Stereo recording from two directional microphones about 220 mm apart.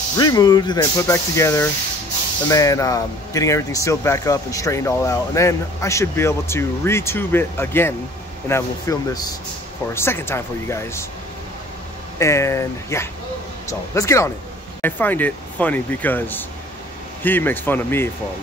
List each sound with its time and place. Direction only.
0.2 s speech: 15° left (ahead or behind)
12.2 s speech: 15° left (ahead or behind)